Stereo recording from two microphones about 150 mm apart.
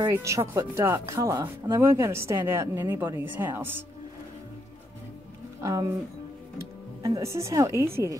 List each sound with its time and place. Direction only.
0.0 s speech: 20° right (ahead or behind)
5.6 s speech: 20° right (ahead or behind)
7.2 s speech: 20° right (ahead or behind)